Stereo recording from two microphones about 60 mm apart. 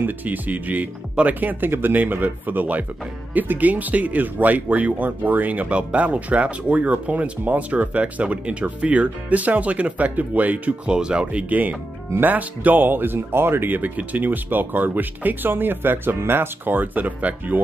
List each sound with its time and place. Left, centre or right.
0.0 s speech: right
10.9 s speech: centre